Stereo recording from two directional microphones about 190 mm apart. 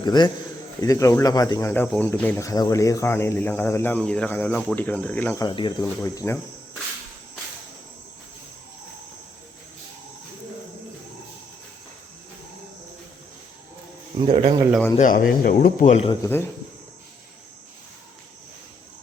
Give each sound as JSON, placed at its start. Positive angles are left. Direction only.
{"t": 0.0, "sound": "a man's voice", "side_deg": 25}
{"t": 5.5, "sound": "speech", "side_deg": 25}
{"t": 5.8, "sound": "speech", "side_deg": 15}
{"t": 14.2, "sound": "speech", "side_deg": -30}
{"t": 14.7, "sound": "speech", "side_deg": 5}
{"t": 14.9, "sound": "speech", "side_deg": 45}
{"t": 16.2, "sound": "speech", "side_deg": 15}